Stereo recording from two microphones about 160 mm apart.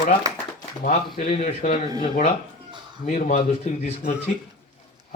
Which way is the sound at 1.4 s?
55° left (ahead or behind).